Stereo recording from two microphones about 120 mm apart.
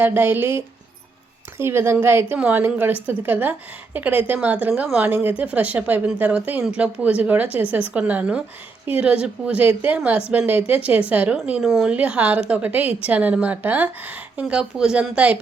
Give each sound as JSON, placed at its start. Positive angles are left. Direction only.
{"t": 0.0, "sound": "a woman's voice", "side_deg": -15}